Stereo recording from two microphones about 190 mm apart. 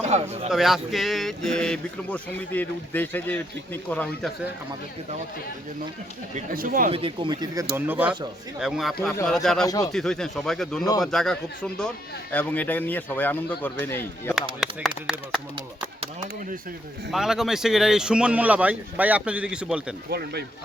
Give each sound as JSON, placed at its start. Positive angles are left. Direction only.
{"t": 0.0, "sound": "a man's voice", "side_deg": -35}
{"t": 0.5, "sound": "speech", "side_deg": 0}
{"t": 6.3, "sound": "speech", "side_deg": -50}
{"t": 6.9, "sound": "speech", "side_deg": -25}
{"t": 9.6, "sound": "speech", "side_deg": 20}
{"t": 9.9, "sound": "a man's voice", "side_deg": 0}
{"t": 14.6, "sound": "speech", "side_deg": 0}
{"t": 17.1, "sound": "speech", "side_deg": 0}
{"t": 20.1, "sound": "speech", "side_deg": -60}